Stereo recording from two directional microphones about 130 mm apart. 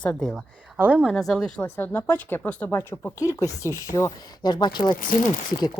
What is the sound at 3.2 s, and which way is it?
Speech, 25° left (ahead or behind).